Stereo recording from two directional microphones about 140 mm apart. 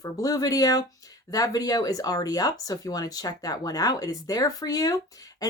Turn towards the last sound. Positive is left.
turn(degrees=25)  # may be behind; listen again after turning